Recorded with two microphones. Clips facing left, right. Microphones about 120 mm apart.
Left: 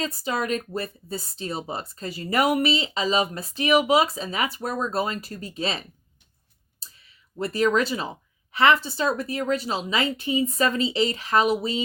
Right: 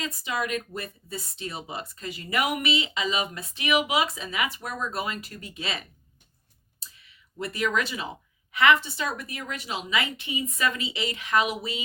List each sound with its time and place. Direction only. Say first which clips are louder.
0.0 s speech: left 3 dB; 35° left (ahead or behind)
6.7 s clicking: even; 35° left (ahead or behind)
8.5 s speech: left 2 dB; 35° left (ahead or behind)